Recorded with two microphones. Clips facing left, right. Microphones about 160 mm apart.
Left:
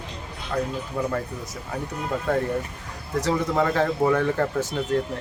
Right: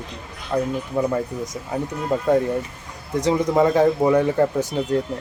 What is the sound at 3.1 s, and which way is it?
Speech, 20° right (ahead or behind).